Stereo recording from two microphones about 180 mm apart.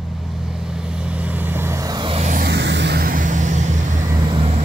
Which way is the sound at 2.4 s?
75° right (ahead or behind).